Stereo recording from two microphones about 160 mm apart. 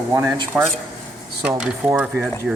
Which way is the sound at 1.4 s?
10° right (ahead or behind).